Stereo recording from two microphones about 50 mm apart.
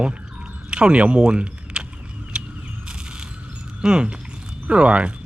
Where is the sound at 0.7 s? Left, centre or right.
Centre.